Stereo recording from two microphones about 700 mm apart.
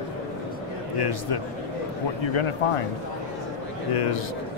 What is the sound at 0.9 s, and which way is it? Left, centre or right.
A man's voice, left.